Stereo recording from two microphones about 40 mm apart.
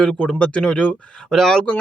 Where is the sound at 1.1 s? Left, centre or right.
Centre.